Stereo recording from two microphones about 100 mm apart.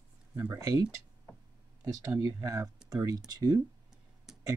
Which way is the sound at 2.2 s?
35° right (ahead or behind).